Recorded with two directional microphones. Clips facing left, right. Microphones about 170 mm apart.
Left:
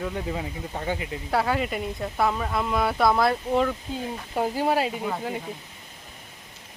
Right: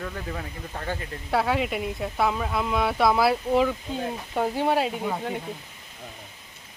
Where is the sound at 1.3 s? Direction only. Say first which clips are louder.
Right 1 dB; centre (ahead or behind).